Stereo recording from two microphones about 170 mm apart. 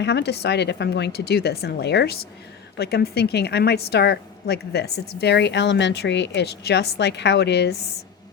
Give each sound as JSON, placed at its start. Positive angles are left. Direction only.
{"t": 0.0, "sound": "a woman's voice", "side_deg": 80}